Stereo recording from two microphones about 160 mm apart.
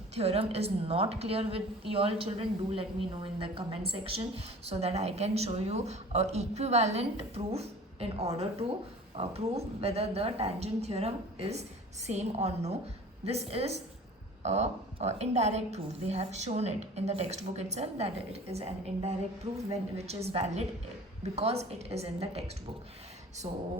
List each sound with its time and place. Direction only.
0.1 s a woman's voice: 40° right (ahead or behind)
19.7 s a woman's voice: 40° right (ahead or behind)
23.4 s a woman's voice: 40° right (ahead or behind)